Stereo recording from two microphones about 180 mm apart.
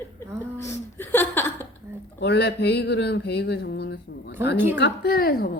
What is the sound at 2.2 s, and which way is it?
A woman's voice, 65° left (ahead or behind).